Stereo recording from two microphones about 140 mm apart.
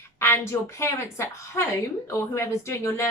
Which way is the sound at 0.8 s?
20° left (ahead or behind).